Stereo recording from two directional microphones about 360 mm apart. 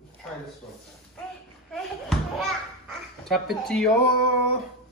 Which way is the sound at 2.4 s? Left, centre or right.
Centre.